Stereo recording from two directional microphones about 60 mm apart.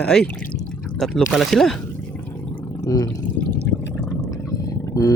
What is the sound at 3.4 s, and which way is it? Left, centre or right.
Water, left.